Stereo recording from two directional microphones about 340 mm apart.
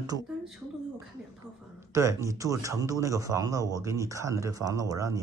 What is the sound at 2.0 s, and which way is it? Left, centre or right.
A man's voice, centre.